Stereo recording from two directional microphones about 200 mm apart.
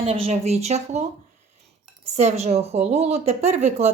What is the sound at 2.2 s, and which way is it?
Speech, 35° right (ahead or behind).